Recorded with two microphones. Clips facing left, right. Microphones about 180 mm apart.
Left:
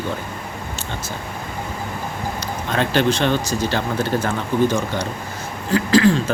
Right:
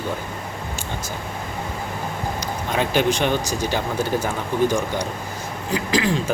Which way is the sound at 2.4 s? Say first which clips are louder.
Left 2 dB; 10° right (ahead or behind).